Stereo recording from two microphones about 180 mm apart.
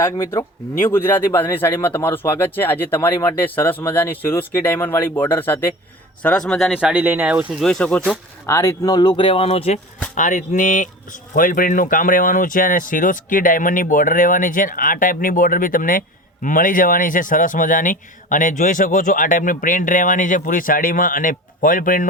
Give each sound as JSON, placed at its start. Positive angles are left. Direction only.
{"t": 0.0, "sound": "speech", "side_deg": 15}
{"t": 7.6, "sound": "speech", "side_deg": 5}
{"t": 10.2, "sound": "speech", "side_deg": 45}